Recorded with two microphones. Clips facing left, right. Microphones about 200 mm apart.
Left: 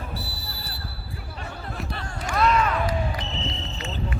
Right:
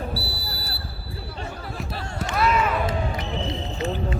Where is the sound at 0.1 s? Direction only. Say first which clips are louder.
Right 4 dB; 40° right (ahead or behind).